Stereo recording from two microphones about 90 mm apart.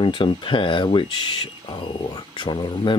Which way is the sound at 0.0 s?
60° left (ahead or behind).